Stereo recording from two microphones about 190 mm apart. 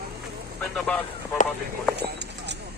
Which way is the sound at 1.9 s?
65° right (ahead or behind).